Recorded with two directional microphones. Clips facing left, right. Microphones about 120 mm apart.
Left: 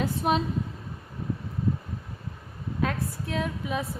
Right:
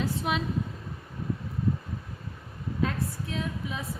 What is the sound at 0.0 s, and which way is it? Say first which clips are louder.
Speech: left 4 dB; 50° left (ahead or behind).